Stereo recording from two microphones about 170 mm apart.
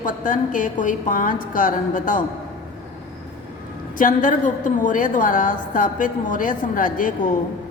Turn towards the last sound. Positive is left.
turn(degrees=50)  # may be behind; listen again after turning